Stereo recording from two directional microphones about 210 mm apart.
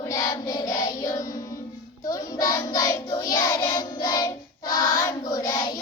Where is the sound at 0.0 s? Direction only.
15° left (ahead or behind).